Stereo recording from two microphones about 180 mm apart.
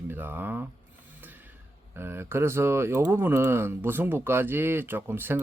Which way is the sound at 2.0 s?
15° right (ahead or behind).